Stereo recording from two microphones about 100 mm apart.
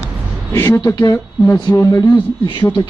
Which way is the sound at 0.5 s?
25° left (ahead or behind).